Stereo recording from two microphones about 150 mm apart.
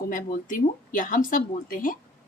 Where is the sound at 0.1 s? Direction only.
60° left (ahead or behind).